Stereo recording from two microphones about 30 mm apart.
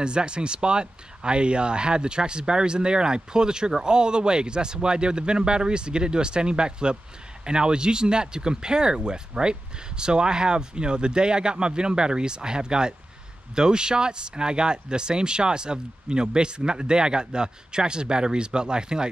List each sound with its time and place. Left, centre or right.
0.0 s speech: right